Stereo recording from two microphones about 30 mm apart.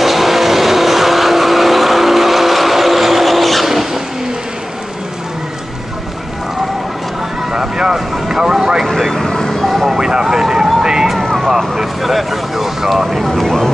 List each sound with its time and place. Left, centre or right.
0.0 s vehicle: centre
3.6 s vehicle: centre
7.5 s vehicle: right
8.8 s vehicle: centre
9.8 s vehicle: right
10.8 s music: centre
11.3 s vehicle: centre
13.3 s vehicle: centre